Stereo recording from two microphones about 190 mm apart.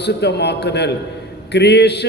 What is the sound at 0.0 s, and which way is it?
A man's voice, 60° left (ahead or behind).